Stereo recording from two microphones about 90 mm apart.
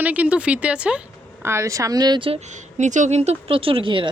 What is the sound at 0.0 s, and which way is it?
Speech, 15° right (ahead or behind).